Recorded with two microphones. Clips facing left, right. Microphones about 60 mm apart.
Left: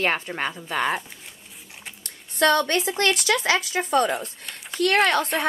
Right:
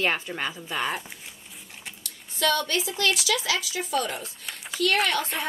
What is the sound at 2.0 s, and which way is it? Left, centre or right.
Speech, left.